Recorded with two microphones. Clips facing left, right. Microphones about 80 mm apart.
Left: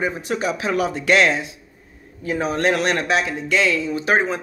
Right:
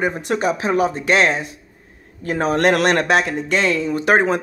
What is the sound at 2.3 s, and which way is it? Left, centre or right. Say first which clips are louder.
Speech: right 3 dB; right.